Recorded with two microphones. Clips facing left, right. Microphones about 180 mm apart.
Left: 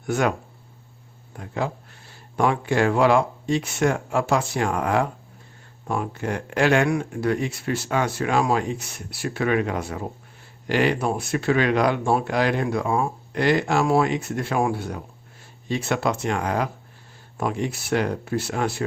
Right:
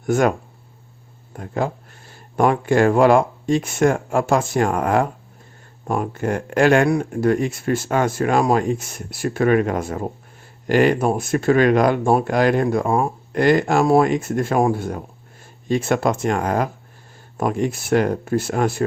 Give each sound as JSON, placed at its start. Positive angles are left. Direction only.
{"t": 0.0, "sound": "speech", "side_deg": -45}
{"t": 1.4, "sound": "speech", "side_deg": -45}